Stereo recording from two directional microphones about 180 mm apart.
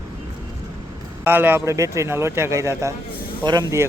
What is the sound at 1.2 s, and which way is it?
Speech, 10° right (ahead or behind).